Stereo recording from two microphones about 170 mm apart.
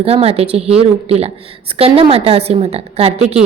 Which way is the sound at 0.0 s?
35° right (ahead or behind).